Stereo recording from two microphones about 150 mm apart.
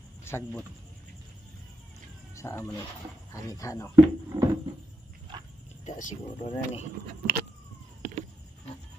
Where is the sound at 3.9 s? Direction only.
25° right (ahead or behind).